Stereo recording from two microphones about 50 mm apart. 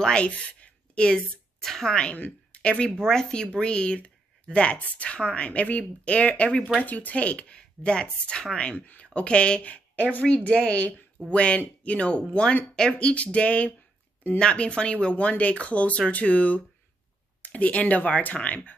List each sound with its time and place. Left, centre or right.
0.0 s speech: left
1.6 s a woman's voice: centre
2.0 s a woman's voice: left
6.8 s speech: left
12.7 s a woman's voice: centre
13.1 s speech: left